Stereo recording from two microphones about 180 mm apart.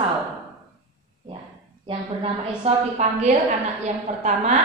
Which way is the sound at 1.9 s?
30° right (ahead or behind).